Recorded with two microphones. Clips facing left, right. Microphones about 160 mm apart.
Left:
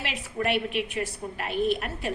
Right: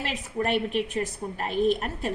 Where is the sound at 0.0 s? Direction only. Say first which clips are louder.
Right 1 dB; 40° right (ahead or behind).